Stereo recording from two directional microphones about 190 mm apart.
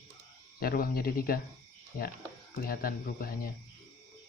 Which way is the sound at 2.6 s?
50° left (ahead or behind).